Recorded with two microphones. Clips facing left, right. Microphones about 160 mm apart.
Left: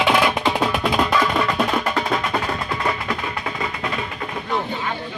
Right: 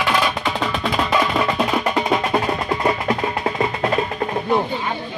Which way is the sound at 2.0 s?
25° right (ahead or behind).